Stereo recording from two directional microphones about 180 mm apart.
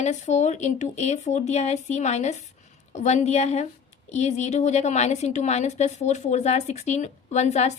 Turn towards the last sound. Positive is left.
turn(degrees=40)  # may be behind; listen again after turning